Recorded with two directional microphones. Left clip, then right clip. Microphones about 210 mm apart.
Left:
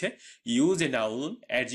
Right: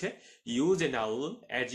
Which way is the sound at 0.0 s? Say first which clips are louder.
Left 5 dB; 40° left (ahead or behind).